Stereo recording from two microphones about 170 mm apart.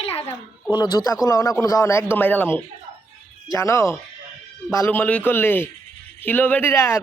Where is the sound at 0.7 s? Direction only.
25° left (ahead or behind).